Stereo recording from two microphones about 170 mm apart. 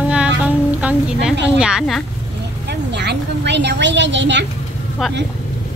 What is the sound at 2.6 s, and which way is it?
A woman's voice, 85° right.